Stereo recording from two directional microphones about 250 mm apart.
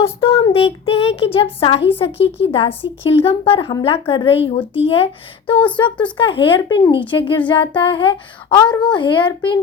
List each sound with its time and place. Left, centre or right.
0.0 s speech: left